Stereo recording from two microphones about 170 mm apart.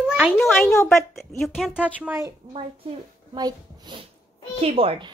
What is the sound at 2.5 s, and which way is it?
Speech, 30° right (ahead or behind).